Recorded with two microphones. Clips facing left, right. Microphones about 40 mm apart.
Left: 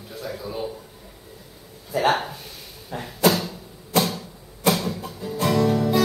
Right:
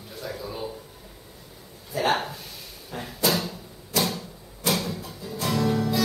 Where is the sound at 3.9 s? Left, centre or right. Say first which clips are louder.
Left 4 dB; left.